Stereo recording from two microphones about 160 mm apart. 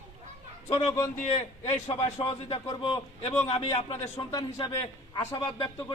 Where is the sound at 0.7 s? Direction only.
35° left (ahead or behind).